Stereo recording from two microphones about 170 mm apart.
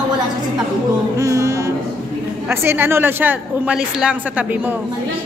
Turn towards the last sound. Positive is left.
turn(degrees=-10)  # may be behind; listen again after turning